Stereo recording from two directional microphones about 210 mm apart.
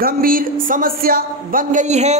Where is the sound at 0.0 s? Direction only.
40° right (ahead or behind).